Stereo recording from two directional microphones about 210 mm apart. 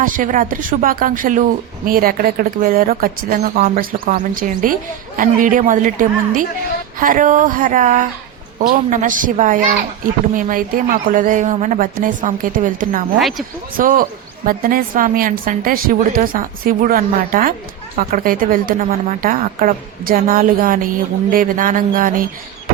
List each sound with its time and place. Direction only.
0.0 s a woman's voice: 40° right (ahead or behind)
13.1 s speech: centre (ahead or behind)
13.7 s a woman's voice: 40° right (ahead or behind)